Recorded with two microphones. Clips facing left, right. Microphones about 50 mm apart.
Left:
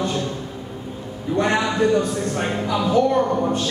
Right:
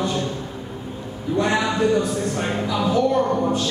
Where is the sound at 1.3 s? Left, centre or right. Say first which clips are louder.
Left 1 dB; left.